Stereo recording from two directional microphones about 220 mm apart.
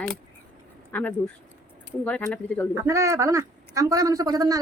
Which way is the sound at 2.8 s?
15° right (ahead or behind).